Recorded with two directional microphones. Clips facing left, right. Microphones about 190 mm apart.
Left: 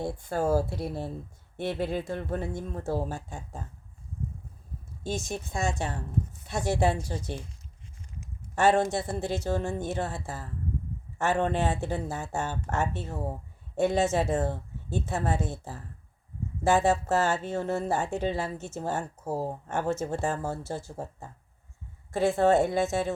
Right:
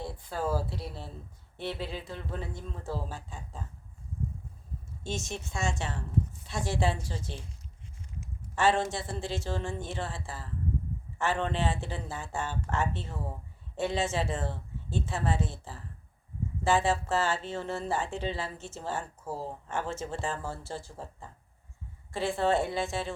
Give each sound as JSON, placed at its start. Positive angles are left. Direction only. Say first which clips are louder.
{"t": 0.0, "sound": "speech", "louder": "left 5 dB", "side_deg": 45}
{"t": 5.5, "sound": "a woman's voice", "louder": "left 3 dB", "side_deg": 35}
{"t": 8.5, "sound": "speech", "louder": "left 4 dB", "side_deg": 45}